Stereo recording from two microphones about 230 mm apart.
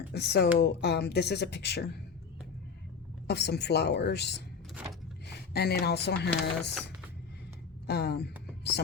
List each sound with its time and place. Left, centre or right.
0.1 s speech: left
3.2 s speech: left
7.9 s speech: left